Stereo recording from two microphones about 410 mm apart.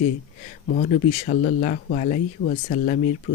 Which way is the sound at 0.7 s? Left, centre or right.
Centre.